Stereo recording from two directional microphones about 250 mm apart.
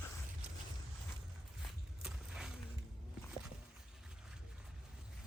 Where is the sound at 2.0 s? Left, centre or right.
Centre.